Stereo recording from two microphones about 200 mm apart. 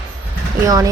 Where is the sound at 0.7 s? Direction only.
15° right (ahead or behind).